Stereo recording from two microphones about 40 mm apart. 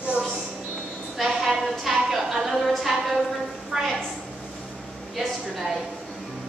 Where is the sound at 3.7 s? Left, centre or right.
Centre.